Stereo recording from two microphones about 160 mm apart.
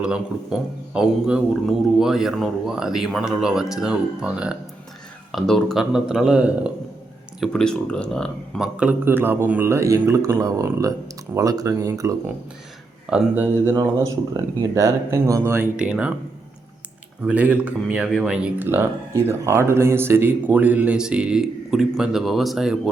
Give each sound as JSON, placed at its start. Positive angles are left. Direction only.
{"t": 0.0, "sound": "a man's voice", "side_deg": -5}
{"t": 13.1, "sound": "speech", "side_deg": -10}
{"t": 17.2, "sound": "speech", "side_deg": -10}